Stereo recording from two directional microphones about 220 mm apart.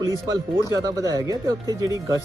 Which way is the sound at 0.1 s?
15° right (ahead or behind).